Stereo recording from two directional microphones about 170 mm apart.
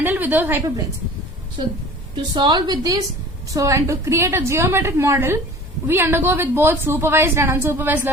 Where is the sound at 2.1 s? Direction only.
25° right (ahead or behind).